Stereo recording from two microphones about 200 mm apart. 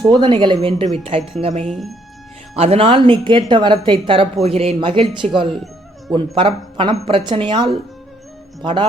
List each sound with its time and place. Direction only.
0.1 s speech: 25° right (ahead or behind)
1.6 s speech: centre (ahead or behind)
2.6 s speech: 30° right (ahead or behind)